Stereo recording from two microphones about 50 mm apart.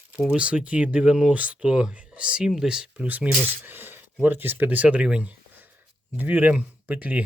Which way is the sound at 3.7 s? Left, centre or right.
Right.